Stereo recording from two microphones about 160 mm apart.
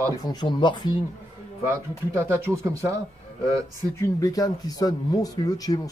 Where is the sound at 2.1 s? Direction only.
15° right (ahead or behind).